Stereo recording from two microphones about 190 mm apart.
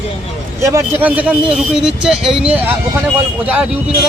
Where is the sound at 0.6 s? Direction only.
10° right (ahead or behind).